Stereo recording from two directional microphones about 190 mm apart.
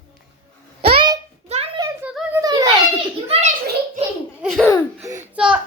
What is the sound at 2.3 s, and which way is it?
Children playing, 20° right (ahead or behind).